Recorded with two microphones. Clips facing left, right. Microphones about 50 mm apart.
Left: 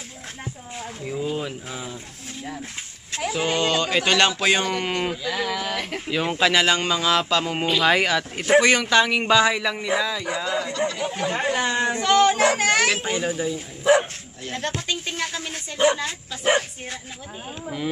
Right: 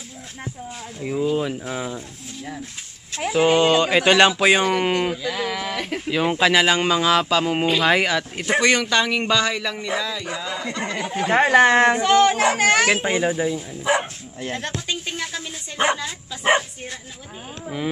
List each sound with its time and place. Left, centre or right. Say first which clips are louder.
1.7 s speech: right 6 dB; right
3.2 s speech: right 6 dB; centre
10.7 s speech: left 1 dB; right
11.3 s speech: right 11 dB; right
12.0 s speech: right 1 dB; centre
12.8 s speech: right 3 dB; centre
15.8 s speech: left 1 dB; right